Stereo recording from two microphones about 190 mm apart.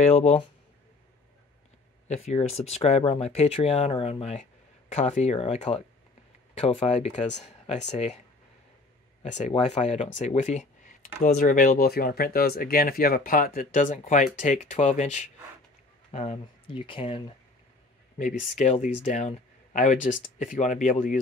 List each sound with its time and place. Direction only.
0.0 s speech: 35° left (ahead or behind)
2.0 s speech: 35° left (ahead or behind)
9.2 s speech: 40° left (ahead or behind)
18.1 s speech: 40° left (ahead or behind)